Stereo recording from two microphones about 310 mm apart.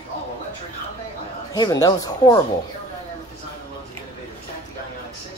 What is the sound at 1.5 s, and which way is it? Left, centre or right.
Speech, centre.